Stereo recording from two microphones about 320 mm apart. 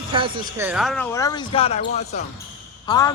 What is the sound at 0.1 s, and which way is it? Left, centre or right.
Speech, centre.